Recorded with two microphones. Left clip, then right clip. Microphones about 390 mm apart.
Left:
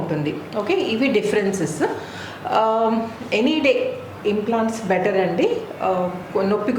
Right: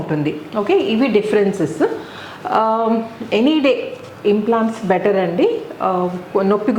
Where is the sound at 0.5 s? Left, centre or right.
Right.